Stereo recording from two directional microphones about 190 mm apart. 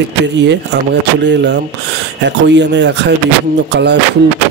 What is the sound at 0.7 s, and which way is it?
Speech, 70° right (ahead or behind).